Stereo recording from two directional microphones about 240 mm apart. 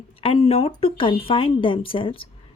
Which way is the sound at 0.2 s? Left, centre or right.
Left.